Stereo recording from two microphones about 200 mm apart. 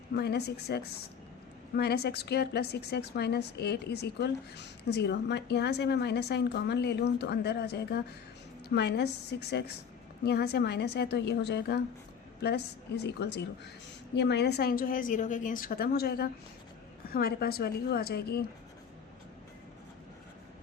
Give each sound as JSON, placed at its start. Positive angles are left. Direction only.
{"t": 0.2, "sound": "a woman's voice", "side_deg": 55}